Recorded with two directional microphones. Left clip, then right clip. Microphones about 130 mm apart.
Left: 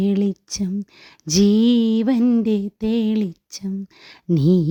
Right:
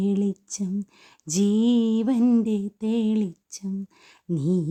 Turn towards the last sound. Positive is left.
turn(degrees=55)  # may be behind; listen again after turning